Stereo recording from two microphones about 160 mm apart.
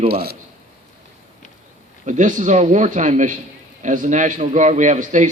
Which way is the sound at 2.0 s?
50° right (ahead or behind).